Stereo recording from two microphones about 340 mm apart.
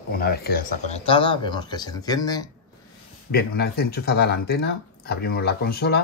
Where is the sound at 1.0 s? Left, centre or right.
Centre.